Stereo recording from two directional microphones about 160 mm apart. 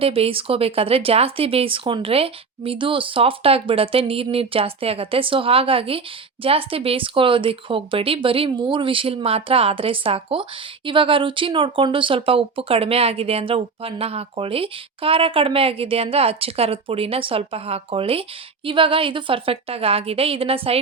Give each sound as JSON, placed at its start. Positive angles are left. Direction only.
{"t": 0.0, "sound": "speech", "side_deg": -35}